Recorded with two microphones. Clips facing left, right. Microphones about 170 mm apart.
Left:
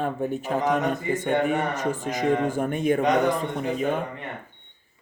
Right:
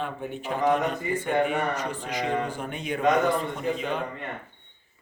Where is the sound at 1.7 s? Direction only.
45° left (ahead or behind).